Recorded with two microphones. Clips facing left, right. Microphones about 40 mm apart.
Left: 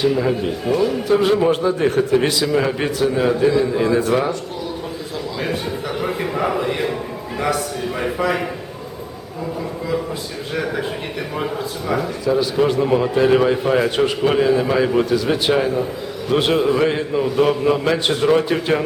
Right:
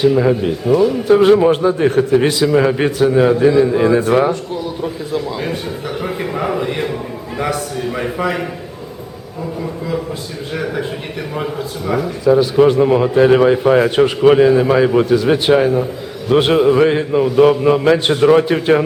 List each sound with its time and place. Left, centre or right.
0.0 s speech: centre
0.7 s a man's voice: centre
1.0 s speech: right
1.4 s a man's voice: centre
6.0 s a man's voice: centre
10.5 s a man's voice: centre
12.2 s a man's voice: centre